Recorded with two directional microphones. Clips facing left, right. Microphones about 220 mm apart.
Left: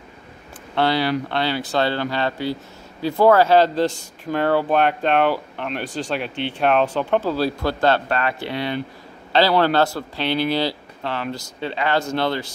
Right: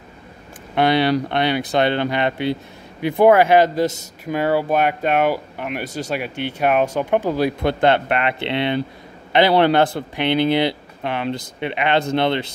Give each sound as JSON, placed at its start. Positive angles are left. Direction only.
{"t": 0.7, "sound": "speech", "side_deg": -20}